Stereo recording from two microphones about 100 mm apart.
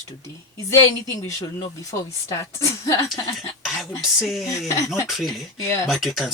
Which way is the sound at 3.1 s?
Centre (ahead or behind).